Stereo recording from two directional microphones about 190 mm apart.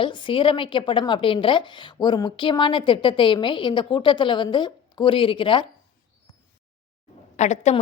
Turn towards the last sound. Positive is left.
turn(degrees=35)  # may be behind; listen again after turning